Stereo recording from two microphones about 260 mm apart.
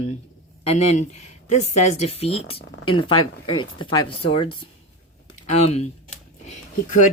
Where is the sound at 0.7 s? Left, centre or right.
Left.